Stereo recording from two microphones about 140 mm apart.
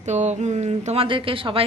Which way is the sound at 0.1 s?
55° right (ahead or behind).